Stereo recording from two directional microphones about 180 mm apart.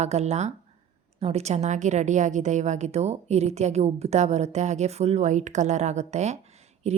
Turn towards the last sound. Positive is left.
turn(degrees=-35)  # may be behind; listen again after turning